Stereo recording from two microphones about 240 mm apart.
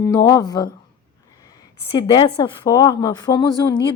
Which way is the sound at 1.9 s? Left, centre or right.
Centre.